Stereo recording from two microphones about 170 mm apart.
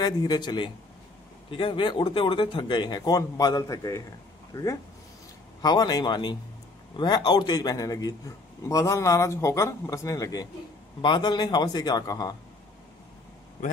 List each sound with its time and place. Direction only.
0.0 s speech: 25° left (ahead or behind)